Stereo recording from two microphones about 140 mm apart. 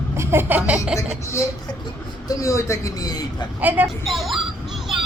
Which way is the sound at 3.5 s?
15° right (ahead or behind).